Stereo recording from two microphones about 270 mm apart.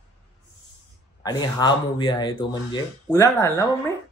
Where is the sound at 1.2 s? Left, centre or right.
Centre.